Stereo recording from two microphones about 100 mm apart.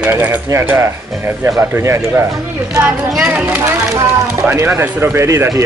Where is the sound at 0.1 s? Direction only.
20° right (ahead or behind).